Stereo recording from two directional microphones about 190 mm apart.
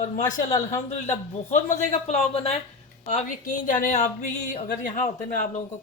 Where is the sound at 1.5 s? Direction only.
40° left (ahead or behind).